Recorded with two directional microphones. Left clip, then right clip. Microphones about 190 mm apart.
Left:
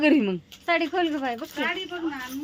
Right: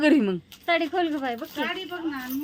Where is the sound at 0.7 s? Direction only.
10° left (ahead or behind).